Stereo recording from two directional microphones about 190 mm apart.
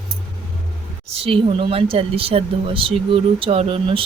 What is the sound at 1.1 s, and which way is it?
Speech, 30° right (ahead or behind).